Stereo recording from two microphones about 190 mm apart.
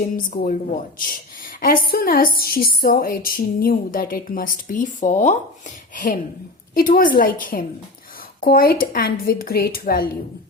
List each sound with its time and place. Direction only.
0.3 s a woman's voice: 45° left (ahead or behind)
1.6 s a woman's voice: 50° left (ahead or behind)